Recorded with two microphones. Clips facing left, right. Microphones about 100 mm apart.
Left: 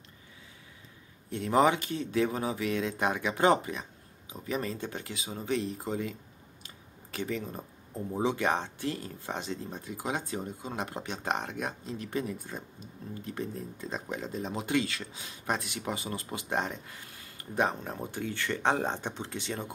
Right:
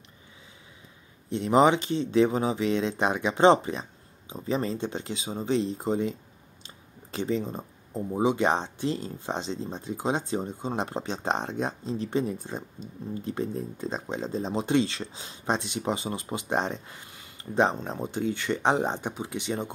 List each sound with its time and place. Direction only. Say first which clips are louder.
1.3 s speech: right 4 dB; 20° right (ahead or behind)
6.6 s clicking: right 5 dB; 25° right (ahead or behind)
8.1 s speech: right 4 dB; 15° right (ahead or behind)